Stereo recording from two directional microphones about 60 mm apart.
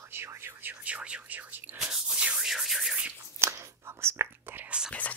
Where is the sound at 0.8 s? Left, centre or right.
Right.